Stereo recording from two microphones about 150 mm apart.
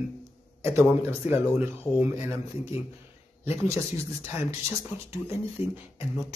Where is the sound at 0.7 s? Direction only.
15° right (ahead or behind).